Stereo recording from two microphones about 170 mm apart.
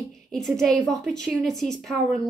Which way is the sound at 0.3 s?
Centre (ahead or behind).